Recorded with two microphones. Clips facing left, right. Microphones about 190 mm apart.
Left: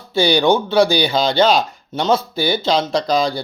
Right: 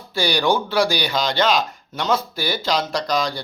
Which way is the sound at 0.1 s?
25° left (ahead or behind).